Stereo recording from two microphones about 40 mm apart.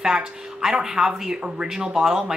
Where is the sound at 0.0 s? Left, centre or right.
Centre.